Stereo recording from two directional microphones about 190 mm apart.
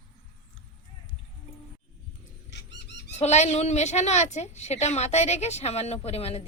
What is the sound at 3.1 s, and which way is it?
A woman's voice, 35° left (ahead or behind).